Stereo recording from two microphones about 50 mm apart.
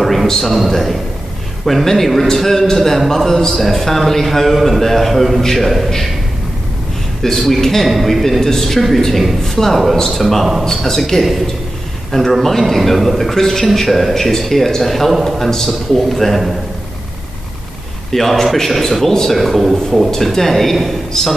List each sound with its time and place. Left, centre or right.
0.0 s a man's voice: centre
7.2 s a man's voice: centre
18.1 s a man's voice: centre